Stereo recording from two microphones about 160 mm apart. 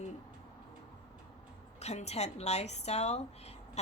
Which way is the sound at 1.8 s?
45° left (ahead or behind).